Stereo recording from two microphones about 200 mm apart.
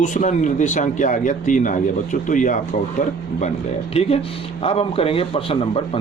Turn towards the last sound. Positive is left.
turn(degrees=25)  # may be behind; listen again after turning